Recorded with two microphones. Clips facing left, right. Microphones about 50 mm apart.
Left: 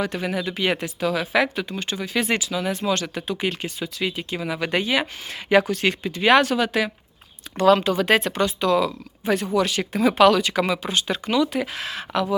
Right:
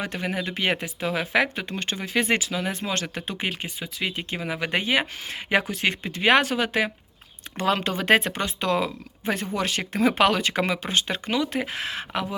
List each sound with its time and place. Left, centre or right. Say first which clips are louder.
0.4 s speech: left 2 dB; right
1.6 s speech: left 1 dB; right
4.1 s speech: left 2 dB; right
4.4 s speech: left 3 dB; centre
6.0 s speech: left 4 dB; right
6.2 s speech: left 3 dB; right